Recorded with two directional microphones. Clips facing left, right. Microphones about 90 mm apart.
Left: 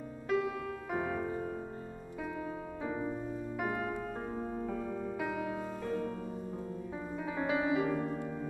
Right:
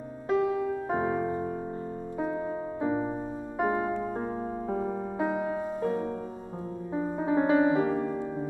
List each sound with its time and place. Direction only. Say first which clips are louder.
0.3 s music: right 7 dB; 30° right (ahead or behind)